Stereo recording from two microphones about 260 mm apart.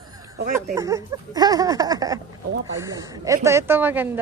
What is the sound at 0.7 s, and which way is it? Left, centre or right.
Speech, centre.